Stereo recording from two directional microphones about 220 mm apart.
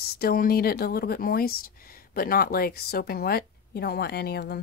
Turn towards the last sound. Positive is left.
turn(degrees=45)  # may be behind; listen again after turning